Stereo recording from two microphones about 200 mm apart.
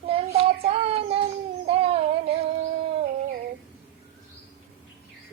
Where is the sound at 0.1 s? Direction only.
30° right (ahead or behind).